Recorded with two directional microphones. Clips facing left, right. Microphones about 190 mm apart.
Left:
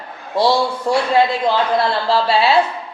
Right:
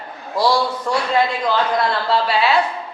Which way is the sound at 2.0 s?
30° left (ahead or behind).